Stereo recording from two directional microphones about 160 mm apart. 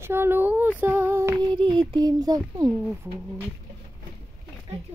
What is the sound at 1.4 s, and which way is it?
A child's voice, 30° right (ahead or behind).